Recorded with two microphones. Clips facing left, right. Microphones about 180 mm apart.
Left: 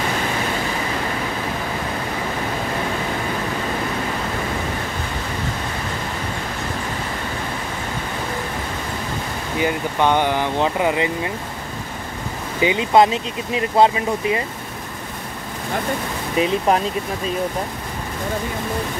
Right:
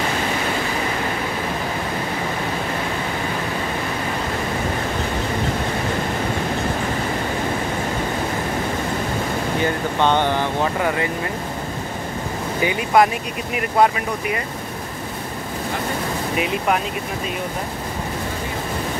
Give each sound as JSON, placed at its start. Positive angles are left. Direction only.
{"t": 9.6, "sound": "speech", "side_deg": 10}
{"t": 12.6, "sound": "speech", "side_deg": 25}
{"t": 16.3, "sound": "speech", "side_deg": 30}